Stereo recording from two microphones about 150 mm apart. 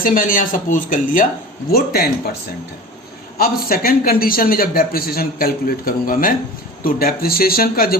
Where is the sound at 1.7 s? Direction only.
90° left.